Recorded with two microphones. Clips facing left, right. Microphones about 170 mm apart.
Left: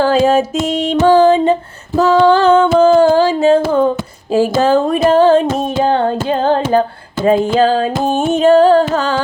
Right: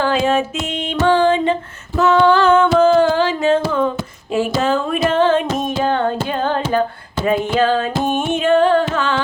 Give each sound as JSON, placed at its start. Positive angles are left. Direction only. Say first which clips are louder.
{"t": 0.0, "sound": "music", "louder": "left 5 dB", "side_deg": 40}